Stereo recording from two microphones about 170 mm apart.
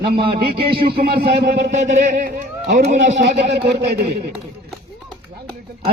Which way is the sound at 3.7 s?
70° right (ahead or behind).